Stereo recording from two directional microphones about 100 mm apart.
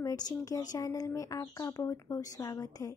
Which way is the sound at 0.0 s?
35° left (ahead or behind).